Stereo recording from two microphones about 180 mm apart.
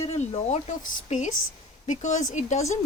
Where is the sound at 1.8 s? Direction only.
40° left (ahead or behind).